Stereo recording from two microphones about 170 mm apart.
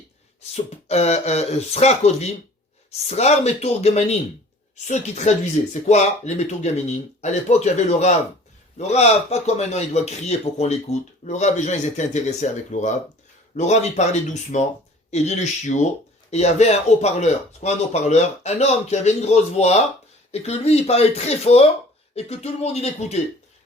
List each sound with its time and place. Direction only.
0.5 s speech: 40° left (ahead or behind)